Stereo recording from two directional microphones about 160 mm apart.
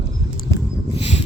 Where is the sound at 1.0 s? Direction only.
40° left (ahead or behind).